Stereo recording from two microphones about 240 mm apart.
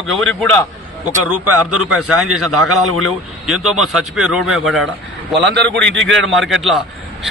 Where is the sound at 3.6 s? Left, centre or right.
Right.